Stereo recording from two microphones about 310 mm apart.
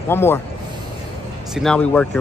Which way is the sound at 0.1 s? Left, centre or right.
Centre.